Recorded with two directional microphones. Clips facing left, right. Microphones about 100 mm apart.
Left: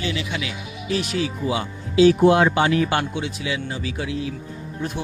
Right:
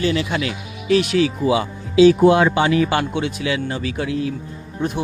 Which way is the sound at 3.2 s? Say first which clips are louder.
Right 5 dB; 65° right (ahead or behind).